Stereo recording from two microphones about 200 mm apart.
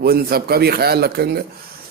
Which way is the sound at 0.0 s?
50° right (ahead or behind).